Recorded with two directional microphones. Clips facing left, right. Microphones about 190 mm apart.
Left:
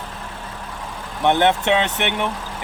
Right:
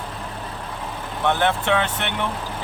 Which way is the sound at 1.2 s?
20° left (ahead or behind).